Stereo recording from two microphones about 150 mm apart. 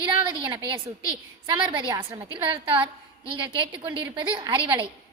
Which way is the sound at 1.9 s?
35° right (ahead or behind).